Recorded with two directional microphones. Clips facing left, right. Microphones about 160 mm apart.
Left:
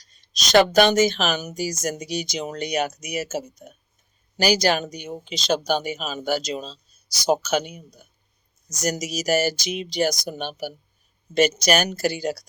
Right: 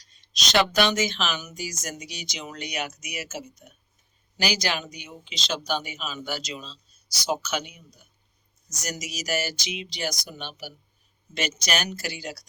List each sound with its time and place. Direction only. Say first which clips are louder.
0.2 s speech: left 7 dB; 45° left (ahead or behind)